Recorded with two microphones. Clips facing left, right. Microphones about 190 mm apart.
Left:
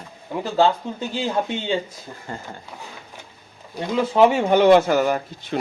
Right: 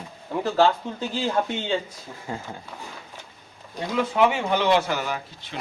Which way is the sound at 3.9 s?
30° left (ahead or behind).